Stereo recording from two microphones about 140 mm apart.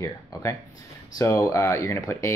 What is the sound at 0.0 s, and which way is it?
Speech, 20° left (ahead or behind).